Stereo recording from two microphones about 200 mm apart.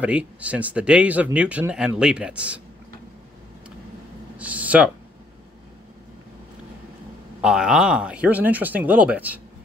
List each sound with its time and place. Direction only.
0.0 s speech: 5° right (ahead or behind)
4.4 s a sound: 5° right (ahead or behind)
7.4 s speech: 5° right (ahead or behind)